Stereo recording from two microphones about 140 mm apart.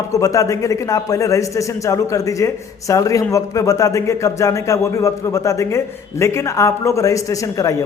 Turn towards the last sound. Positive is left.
turn(degrees=25)  # may be behind; listen again after turning